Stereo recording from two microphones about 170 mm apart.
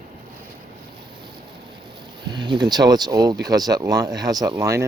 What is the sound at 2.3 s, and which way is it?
Speech, 25° right (ahead or behind).